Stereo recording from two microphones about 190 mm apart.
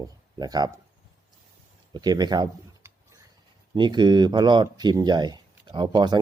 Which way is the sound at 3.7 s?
25° right (ahead or behind).